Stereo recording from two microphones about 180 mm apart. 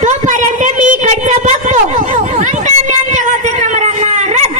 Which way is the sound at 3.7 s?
40° right (ahead or behind).